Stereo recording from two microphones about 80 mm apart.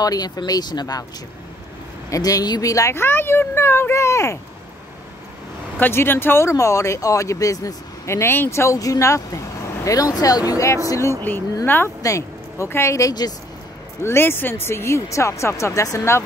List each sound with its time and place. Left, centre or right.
0.0 s speech: left
2.0 s speech: left
3.0 s speech: left
5.8 s speech: left
11.6 s speech: left
12.0 s speech: left